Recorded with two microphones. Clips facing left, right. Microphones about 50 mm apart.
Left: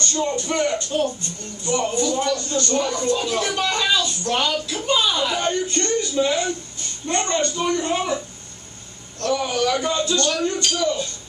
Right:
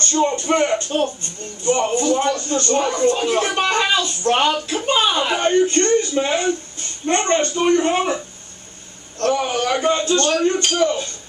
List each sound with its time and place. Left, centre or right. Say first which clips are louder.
0.0 s speech: right 4 dB; right
9.2 s speech: right 2 dB; right